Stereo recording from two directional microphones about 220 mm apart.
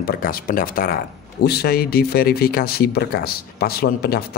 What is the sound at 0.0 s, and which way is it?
A man's voice, 40° left (ahead or behind).